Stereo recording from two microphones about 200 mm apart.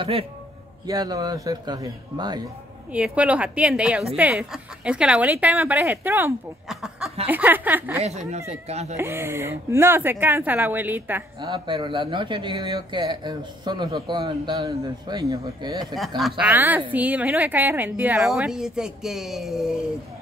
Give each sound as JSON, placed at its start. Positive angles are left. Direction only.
{"t": 0.0, "sound": "speech", "side_deg": -30}
{"t": 2.9, "sound": "a woman's voice", "side_deg": -5}
{"t": 8.0, "sound": "speech", "side_deg": -35}
{"t": 8.9, "sound": "a woman's voice", "side_deg": -10}
{"t": 11.4, "sound": "speech", "side_deg": -25}
{"t": 16.2, "sound": "a woman's voice", "side_deg": -5}